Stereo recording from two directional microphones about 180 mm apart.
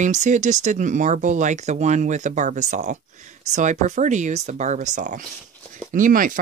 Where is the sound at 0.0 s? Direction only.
40° right (ahead or behind).